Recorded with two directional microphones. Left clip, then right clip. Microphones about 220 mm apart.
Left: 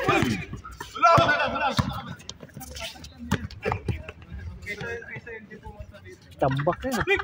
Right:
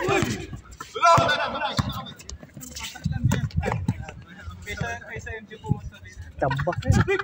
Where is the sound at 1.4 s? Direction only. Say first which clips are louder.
Left 2 dB; 40° left (ahead or behind).